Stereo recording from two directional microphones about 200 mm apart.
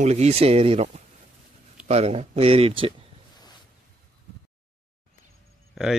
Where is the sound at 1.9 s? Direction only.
30° right (ahead or behind).